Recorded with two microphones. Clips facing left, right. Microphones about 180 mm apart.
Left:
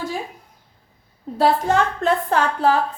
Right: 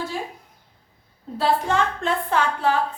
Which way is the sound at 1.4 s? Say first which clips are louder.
Left 4 dB; 40° left (ahead or behind).